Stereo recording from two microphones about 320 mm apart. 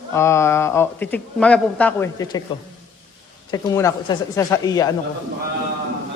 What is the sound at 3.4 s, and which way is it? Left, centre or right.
Speech, centre.